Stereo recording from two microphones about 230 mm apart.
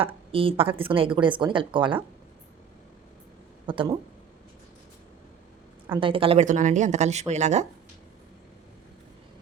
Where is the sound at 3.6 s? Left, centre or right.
Right.